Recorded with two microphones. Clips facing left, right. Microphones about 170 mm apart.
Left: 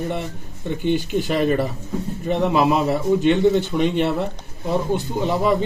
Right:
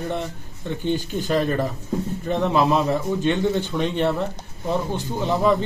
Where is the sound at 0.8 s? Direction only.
15° left (ahead or behind).